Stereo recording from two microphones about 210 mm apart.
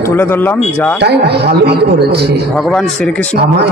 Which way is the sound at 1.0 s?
50° right (ahead or behind).